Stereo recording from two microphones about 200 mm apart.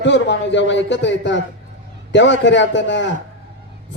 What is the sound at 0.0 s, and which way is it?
A man's voice, 65° left (ahead or behind).